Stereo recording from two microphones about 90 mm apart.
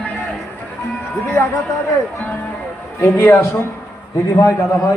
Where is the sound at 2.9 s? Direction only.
30° left (ahead or behind).